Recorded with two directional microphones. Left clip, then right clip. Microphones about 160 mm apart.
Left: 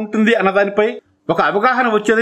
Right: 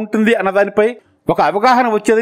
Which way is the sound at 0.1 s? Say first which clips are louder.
Even; 35° right (ahead or behind).